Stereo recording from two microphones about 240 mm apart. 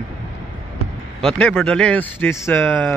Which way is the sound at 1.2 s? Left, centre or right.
Centre.